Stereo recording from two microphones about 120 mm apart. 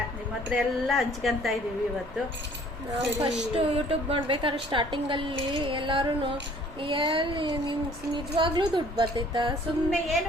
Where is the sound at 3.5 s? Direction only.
50° right (ahead or behind).